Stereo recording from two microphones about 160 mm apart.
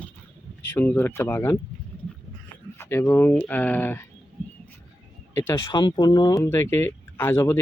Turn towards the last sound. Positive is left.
turn(degrees=15)  # may be behind; listen again after turning